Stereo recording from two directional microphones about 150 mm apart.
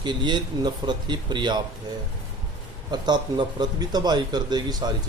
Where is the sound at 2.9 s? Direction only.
30° right (ahead or behind).